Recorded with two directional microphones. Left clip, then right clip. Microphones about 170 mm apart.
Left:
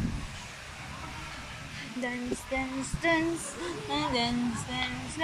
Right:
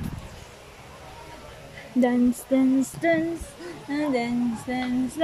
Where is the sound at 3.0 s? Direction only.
55° right (ahead or behind).